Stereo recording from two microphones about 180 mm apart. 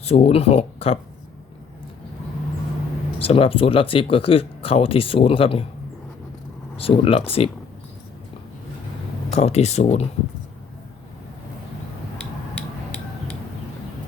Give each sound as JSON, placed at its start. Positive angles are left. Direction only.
{"t": 0.0, "sound": "speech", "side_deg": 35}
{"t": 3.2, "sound": "speech", "side_deg": 30}
{"t": 6.7, "sound": "speech", "side_deg": 30}
{"t": 9.3, "sound": "speech", "side_deg": 35}
{"t": 12.5, "sound": "a sound", "side_deg": 5}